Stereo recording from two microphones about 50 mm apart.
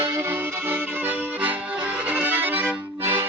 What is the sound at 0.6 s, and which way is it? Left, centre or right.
Accordion, right.